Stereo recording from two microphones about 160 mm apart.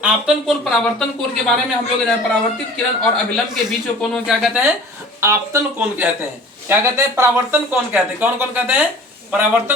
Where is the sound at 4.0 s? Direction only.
Centre (ahead or behind).